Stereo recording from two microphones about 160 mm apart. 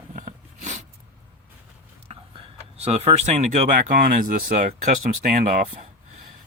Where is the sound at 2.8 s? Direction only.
40° right (ahead or behind).